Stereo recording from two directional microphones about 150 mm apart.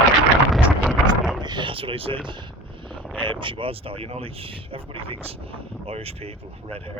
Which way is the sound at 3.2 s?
35° right (ahead or behind).